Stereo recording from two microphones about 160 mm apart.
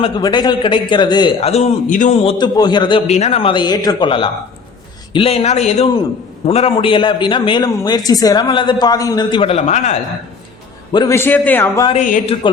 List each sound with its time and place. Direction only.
0.2 s a man's voice: 25° left (ahead or behind)
1.4 s a man's voice: 40° left (ahead or behind)
2.6 s a man's voice: 25° left (ahead or behind)
3.1 s a man's voice: 40° left (ahead or behind)
10.9 s a man's voice: 20° left (ahead or behind)
11.9 s speech: 55° left (ahead or behind)
12.2 s a man's voice: 40° left (ahead or behind)